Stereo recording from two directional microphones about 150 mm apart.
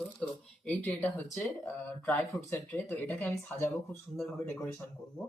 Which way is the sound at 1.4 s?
10° left (ahead or behind).